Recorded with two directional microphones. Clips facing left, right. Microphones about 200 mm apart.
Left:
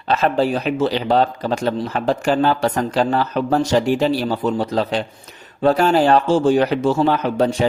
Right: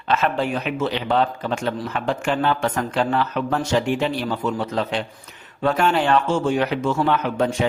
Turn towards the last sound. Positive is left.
turn(degrees=35)  # may be behind; listen again after turning